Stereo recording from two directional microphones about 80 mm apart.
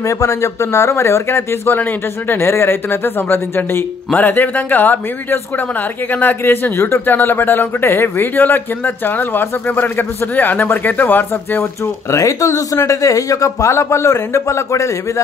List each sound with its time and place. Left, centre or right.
0.0 s speech: left
12.1 s a man's voice: left